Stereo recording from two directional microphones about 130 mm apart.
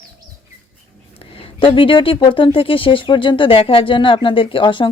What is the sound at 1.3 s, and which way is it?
A woman's voice, 40° left (ahead or behind).